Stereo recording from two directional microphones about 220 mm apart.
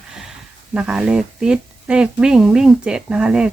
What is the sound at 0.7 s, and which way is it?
Speech, 5° right (ahead or behind).